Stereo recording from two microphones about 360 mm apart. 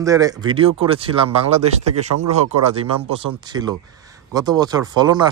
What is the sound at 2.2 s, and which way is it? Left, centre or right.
Speech, right.